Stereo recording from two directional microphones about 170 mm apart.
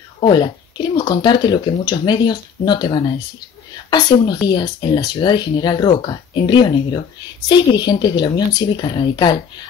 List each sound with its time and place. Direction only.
0.2 s speech: 25° left (ahead or behind)
4.5 s speech: 25° left (ahead or behind)